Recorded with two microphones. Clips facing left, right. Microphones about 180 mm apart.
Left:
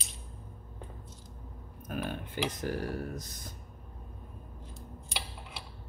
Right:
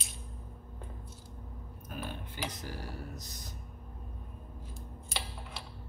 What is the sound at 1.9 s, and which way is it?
Speech, 55° left (ahead or behind).